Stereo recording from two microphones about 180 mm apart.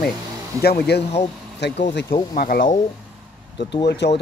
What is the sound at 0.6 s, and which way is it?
Speech, 60° left (ahead or behind).